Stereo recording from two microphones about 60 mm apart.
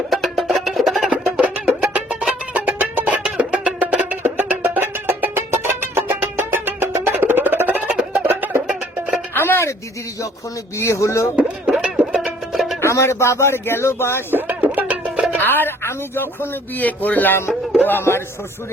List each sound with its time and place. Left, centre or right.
0.1 s music: centre
1.1 s music: centre
4.2 s music: right
9.3 s music: left
10.8 s speech: left
11.3 s music: right
12.1 s music: centre
12.8 s speech: left
14.4 s music: right
15.4 s speech: left
17.5 s music: centre
17.8 s speech: left